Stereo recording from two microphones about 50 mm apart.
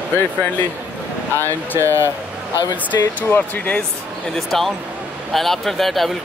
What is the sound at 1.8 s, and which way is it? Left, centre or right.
Speech, right.